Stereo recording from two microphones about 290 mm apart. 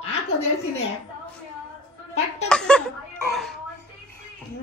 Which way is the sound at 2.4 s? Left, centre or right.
Centre.